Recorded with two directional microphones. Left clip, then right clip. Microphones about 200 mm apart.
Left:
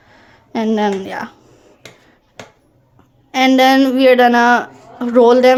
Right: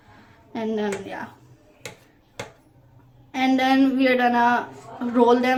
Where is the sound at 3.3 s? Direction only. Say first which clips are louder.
Left 9 dB; 55° left (ahead or behind).